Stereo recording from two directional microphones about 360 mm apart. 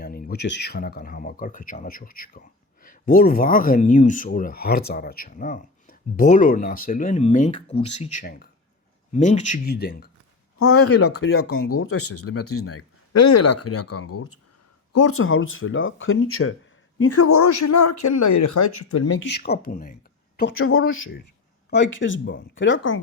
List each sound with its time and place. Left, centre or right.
0.0 s speech: left
10.6 s speech: left
19.2 s speech: left